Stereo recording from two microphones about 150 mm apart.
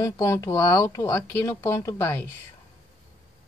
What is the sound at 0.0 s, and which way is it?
Speech, 25° left (ahead or behind).